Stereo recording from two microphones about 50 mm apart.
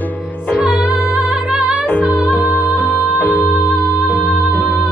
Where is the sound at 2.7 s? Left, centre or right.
Left.